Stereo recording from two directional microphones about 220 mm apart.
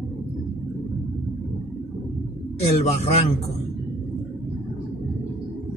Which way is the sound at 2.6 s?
30° left (ahead or behind).